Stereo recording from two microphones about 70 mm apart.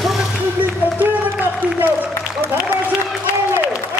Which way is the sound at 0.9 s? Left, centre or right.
Right.